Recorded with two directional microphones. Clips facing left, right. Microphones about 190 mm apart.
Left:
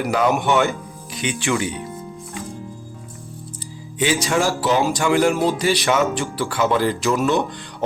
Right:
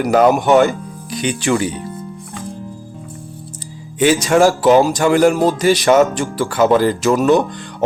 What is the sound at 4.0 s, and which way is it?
Speech, 50° right (ahead or behind).